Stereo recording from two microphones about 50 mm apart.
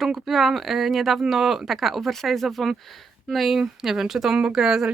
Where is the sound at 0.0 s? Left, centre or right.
Centre.